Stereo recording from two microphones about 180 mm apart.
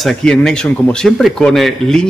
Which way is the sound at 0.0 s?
Centre (ahead or behind).